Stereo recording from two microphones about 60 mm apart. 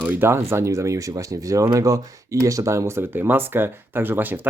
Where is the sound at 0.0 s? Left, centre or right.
Right.